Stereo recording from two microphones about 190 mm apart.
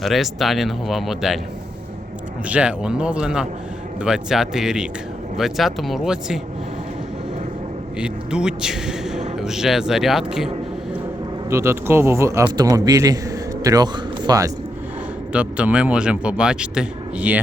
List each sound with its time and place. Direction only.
0.0 s speech: centre (ahead or behind)
2.5 s speech: 5° right (ahead or behind)
7.9 s speech: 5° right (ahead or behind)
11.4 s speech: 15° right (ahead or behind)
15.3 s speech: 5° right (ahead or behind)